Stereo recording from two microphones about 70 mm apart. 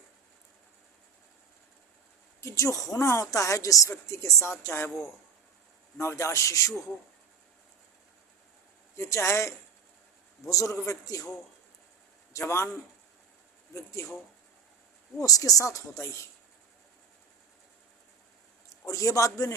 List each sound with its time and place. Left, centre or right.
2.4 s speech: left
6.0 s speech: left
9.0 s speech: left
12.3 s speech: left
13.7 s speech: left
15.2 s speech: left
18.7 s a man's voice: left